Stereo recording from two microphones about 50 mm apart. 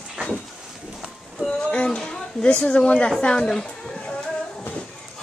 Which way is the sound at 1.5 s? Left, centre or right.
Centre.